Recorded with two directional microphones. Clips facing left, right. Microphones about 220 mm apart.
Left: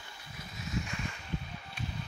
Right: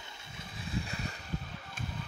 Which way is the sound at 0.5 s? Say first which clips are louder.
Left 1 dB; 30° right (ahead or behind).